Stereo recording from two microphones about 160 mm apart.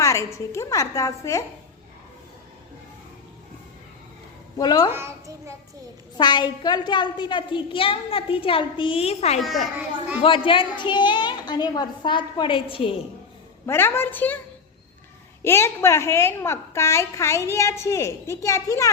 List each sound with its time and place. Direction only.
0.0 s a woman's voice: 20° left (ahead or behind)
4.5 s a woman's voice: 25° left (ahead or behind)
4.9 s a child's voice: 15° right (ahead or behind)
6.1 s a woman's voice: 25° left (ahead or behind)
13.7 s a woman's voice: 15° left (ahead or behind)
15.4 s a woman's voice: 15° left (ahead or behind)